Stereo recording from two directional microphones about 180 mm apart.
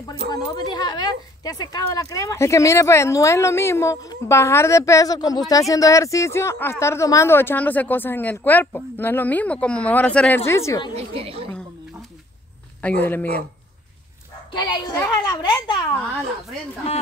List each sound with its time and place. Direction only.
0.3 s speech: 20° left (ahead or behind)
11.0 s a woman's voice: 35° right (ahead or behind)
12.8 s speech: 10° left (ahead or behind)
14.5 s a child's voice: 25° left (ahead or behind)